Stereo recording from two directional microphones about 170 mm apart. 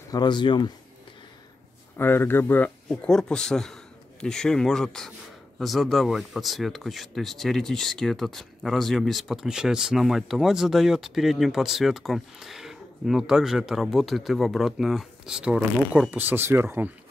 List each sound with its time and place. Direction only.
0.1 s speech: 25° left (ahead or behind)
2.0 s a man's voice: 15° left (ahead or behind); by 16.9 s 10° right (ahead or behind)